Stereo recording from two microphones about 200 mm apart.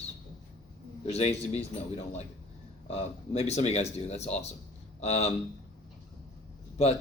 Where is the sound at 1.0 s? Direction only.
30° left (ahead or behind).